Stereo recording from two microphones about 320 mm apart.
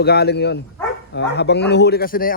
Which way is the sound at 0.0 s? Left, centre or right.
Left.